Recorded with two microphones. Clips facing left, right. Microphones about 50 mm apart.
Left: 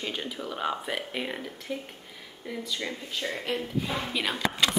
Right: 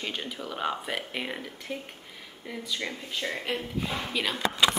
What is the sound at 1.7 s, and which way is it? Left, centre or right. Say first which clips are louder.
Speech: left 1 dB; centre.